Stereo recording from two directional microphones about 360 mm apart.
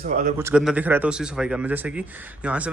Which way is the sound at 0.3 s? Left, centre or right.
Centre.